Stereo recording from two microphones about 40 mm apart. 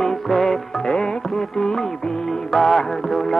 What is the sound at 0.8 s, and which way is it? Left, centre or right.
Music, centre.